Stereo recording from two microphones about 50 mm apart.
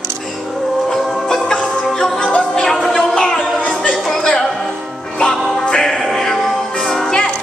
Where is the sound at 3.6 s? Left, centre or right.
Left.